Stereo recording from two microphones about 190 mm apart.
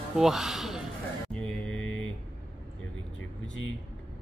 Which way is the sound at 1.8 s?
90° left.